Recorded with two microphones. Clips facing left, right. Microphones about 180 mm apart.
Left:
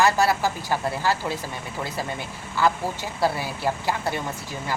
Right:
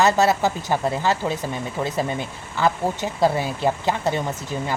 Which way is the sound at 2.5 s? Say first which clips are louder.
Right 2 dB; 20° right (ahead or behind).